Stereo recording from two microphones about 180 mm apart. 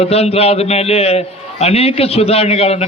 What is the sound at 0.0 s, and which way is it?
A man's voice, 35° left (ahead or behind).